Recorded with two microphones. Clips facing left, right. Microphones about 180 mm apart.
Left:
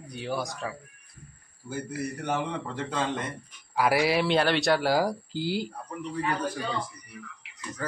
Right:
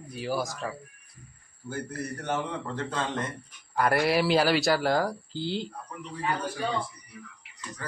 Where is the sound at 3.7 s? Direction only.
5° left (ahead or behind).